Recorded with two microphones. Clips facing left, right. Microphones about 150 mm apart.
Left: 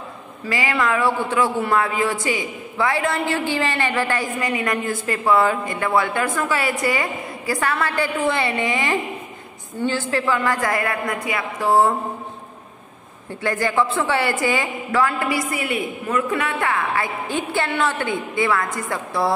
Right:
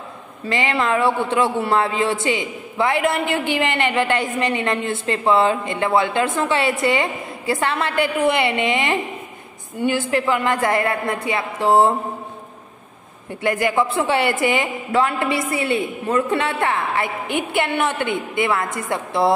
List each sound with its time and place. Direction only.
0.5 s a man's voice: 25° right (ahead or behind)
13.4 s a man's voice: 20° right (ahead or behind)